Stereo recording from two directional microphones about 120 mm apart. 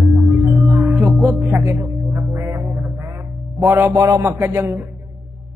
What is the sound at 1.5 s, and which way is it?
Speech, 20° right (ahead or behind).